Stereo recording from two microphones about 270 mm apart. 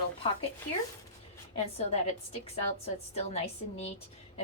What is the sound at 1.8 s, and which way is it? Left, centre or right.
A woman's voice, left.